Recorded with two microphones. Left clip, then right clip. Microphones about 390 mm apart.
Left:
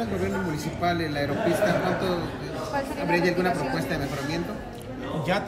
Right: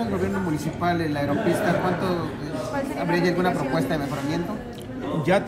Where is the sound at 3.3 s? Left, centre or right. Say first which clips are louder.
Right 2 dB; centre.